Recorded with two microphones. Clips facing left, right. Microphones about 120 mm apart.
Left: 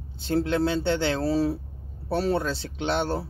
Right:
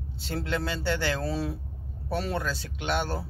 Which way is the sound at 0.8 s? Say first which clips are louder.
Left 4 dB; 25° left (ahead or behind).